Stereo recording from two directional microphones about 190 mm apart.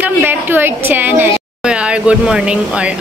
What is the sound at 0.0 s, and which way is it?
A woman's voice, 10° right (ahead or behind).